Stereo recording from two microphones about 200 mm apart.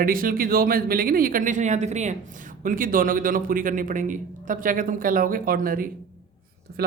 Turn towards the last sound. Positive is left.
turn(degrees=-50)  # may be behind; listen again after turning